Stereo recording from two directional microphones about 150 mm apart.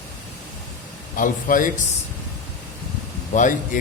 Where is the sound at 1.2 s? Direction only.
65° left (ahead or behind).